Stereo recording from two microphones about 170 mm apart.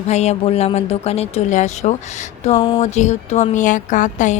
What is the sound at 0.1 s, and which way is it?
Speech, 40° left (ahead or behind).